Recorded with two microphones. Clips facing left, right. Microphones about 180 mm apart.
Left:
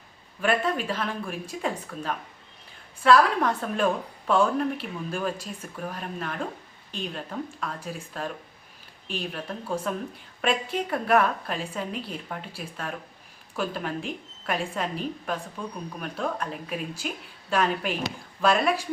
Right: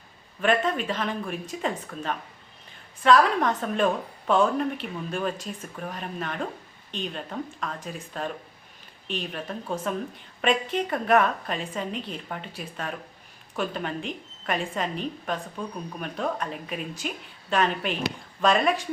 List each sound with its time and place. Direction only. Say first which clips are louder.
0.4 s a woman's voice: right 1 dB; 5° left (ahead or behind)